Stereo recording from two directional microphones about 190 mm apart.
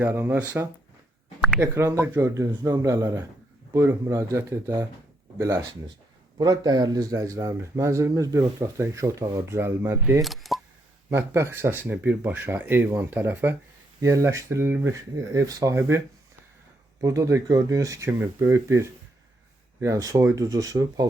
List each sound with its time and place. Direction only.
0.0 s speech: 10° right (ahead or behind)
6.3 s speech: 20° right (ahead or behind)
10.2 s speech: centre (ahead or behind)
11.1 s speech: 15° right (ahead or behind)